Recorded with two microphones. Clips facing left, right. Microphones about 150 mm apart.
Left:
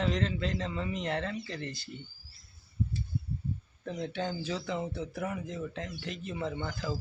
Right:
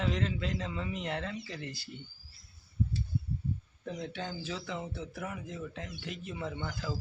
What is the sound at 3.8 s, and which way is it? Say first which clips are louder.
Speech: left 4 dB; centre (ahead or behind).